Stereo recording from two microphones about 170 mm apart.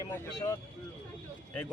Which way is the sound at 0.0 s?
20° left (ahead or behind).